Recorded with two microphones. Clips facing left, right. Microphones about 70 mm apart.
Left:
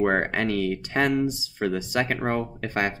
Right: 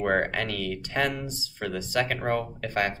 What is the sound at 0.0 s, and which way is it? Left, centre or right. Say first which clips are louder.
Speech: left 3 dB; left.